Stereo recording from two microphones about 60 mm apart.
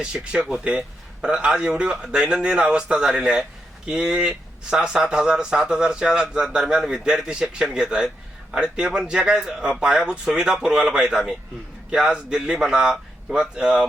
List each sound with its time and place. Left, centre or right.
0.0 s a man's voice: centre